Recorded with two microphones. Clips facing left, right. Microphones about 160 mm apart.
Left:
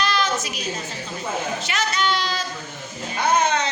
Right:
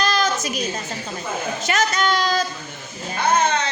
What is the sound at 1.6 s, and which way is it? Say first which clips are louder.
Speech: right 7 dB; 45° right (ahead or behind).